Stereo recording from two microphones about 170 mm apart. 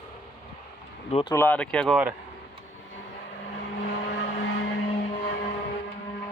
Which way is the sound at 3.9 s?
85° left.